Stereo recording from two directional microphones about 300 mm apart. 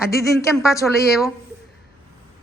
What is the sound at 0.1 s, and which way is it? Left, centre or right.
Speech, centre.